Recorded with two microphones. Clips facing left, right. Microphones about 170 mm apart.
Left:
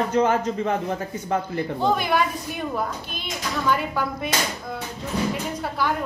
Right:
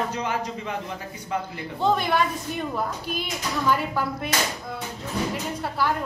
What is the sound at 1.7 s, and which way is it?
A woman's voice, centre (ahead or behind).